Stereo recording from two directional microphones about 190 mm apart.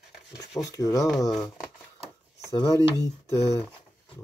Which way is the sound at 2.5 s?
25° left (ahead or behind).